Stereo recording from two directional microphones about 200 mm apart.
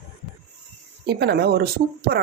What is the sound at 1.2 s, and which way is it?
Speech, 55° right (ahead or behind).